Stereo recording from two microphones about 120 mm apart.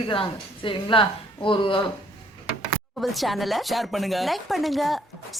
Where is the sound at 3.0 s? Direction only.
Centre (ahead or behind).